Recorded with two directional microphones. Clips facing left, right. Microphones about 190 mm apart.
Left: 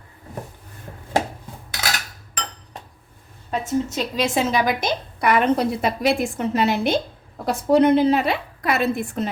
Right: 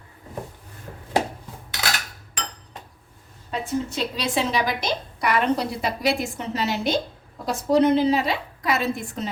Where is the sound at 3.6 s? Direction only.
45° left (ahead or behind).